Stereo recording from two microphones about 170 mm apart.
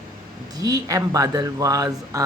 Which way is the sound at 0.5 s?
20° right (ahead or behind).